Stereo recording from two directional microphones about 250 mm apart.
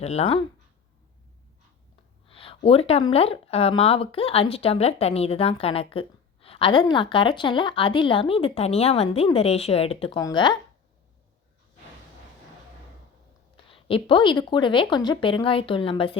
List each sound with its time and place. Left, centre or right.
0.0 s speech: left
2.3 s speech: left
13.7 s speech: left